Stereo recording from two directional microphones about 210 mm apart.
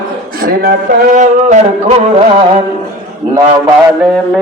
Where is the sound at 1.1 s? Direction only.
35° right (ahead or behind).